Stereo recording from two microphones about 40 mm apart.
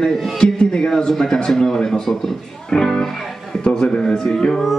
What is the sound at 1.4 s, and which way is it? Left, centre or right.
Speech, centre.